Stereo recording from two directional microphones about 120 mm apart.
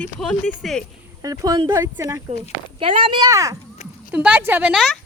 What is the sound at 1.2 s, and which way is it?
Speech, 30° right (ahead or behind).